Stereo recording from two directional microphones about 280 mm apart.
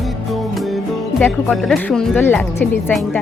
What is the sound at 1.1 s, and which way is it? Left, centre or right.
Speech, centre.